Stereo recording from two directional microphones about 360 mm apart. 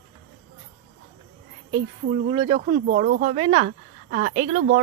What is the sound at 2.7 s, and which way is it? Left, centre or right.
A woman's voice, right.